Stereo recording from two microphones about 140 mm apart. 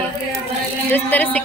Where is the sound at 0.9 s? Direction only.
10° left (ahead or behind).